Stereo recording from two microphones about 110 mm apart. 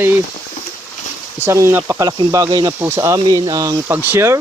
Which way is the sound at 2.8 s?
20° right (ahead or behind).